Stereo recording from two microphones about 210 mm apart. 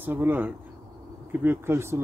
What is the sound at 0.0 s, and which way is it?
Speech, 10° right (ahead or behind).